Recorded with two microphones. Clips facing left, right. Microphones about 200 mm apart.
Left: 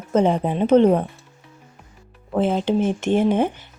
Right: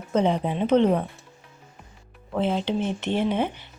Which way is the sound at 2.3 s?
45° left (ahead or behind).